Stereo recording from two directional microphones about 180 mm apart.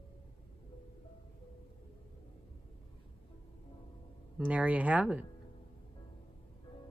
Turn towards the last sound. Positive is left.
turn(degrees=-5)  # may be behind; listen again after turning